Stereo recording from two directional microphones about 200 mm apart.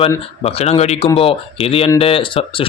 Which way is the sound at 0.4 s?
30° left (ahead or behind).